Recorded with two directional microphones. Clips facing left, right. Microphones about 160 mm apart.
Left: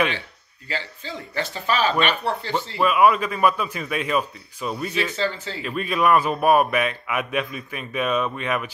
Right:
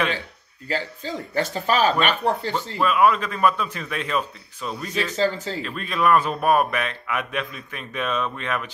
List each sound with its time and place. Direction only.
0.7 s speech: 45° right (ahead or behind)
2.8 s a man's voice: 10° left (ahead or behind)
5.1 s speech: 40° right (ahead or behind)
5.6 s a man's voice: 10° left (ahead or behind)